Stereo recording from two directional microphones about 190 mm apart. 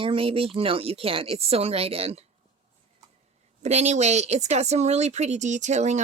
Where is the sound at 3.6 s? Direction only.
35° right (ahead or behind).